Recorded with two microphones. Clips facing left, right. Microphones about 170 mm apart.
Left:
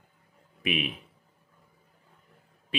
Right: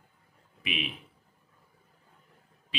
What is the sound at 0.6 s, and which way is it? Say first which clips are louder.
Speech: left 5 dB; 50° left (ahead or behind).